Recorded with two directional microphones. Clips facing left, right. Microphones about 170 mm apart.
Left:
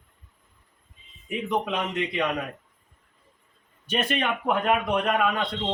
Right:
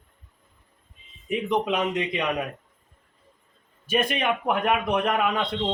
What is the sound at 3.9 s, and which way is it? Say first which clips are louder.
A man's voice: right 2 dB; 15° right (ahead or behind).